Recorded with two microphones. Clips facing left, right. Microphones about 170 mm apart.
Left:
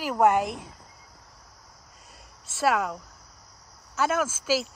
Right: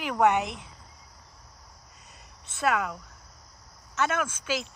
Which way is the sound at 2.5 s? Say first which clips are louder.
Left 2 dB; 5° left (ahead or behind).